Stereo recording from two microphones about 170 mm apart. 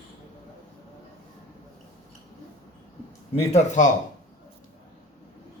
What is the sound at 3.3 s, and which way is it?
Speech, 40° left (ahead or behind).